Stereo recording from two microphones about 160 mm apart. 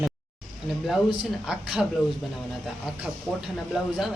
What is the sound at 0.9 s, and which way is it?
Speech, centre (ahead or behind).